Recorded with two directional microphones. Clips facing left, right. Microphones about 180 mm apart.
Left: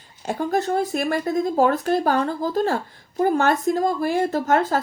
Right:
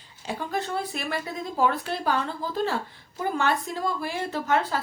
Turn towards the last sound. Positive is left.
turn(degrees=45)  # may be behind; listen again after turning